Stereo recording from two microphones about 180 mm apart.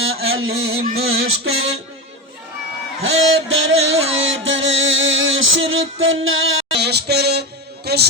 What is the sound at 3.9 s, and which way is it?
Music, 90° right.